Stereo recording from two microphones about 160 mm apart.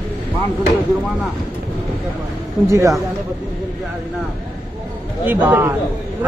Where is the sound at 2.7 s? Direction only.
20° right (ahead or behind).